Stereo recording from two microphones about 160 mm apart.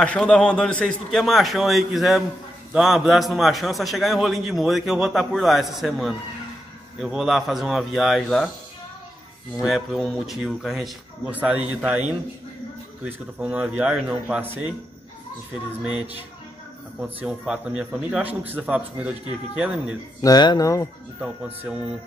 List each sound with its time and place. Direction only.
0.0 s a man's voice: 5° left (ahead or behind)
9.6 s a man's voice: centre (ahead or behind)
13.0 s a man's voice: 5° right (ahead or behind)
15.8 s a man's voice: 5° right (ahead or behind)
20.2 s speech: 25° left (ahead or behind)
21.2 s a man's voice: 5° right (ahead or behind)